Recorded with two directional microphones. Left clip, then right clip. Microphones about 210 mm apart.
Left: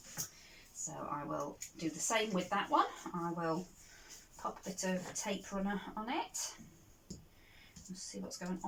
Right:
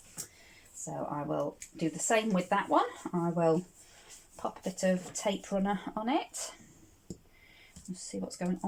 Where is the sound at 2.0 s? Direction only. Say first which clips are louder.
Right 6 dB; 40° right (ahead or behind).